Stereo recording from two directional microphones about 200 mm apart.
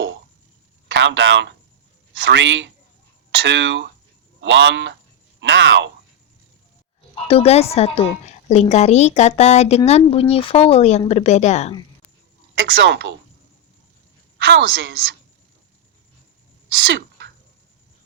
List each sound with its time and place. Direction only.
0.9 s a woman's voice: 65° right (ahead or behind)
7.3 s a woman's voice: 30° left (ahead or behind)
12.5 s a woman's voice: 70° right (ahead or behind)
14.3 s a woman's voice: 65° right (ahead or behind)
16.6 s sneeze: 70° right (ahead or behind)